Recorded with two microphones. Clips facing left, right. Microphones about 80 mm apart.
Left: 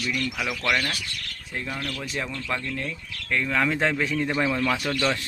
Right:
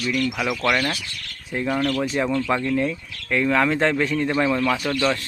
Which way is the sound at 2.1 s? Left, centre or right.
Right.